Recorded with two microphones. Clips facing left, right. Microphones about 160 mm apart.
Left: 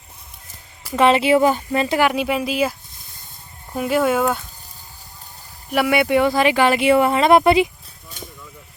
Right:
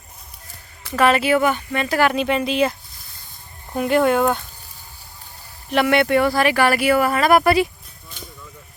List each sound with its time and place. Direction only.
0.9 s speech: 25° left (ahead or behind)
1.9 s speech: 10° left (ahead or behind)
3.8 s speech: centre (ahead or behind)
5.7 s speech: 5° left (ahead or behind)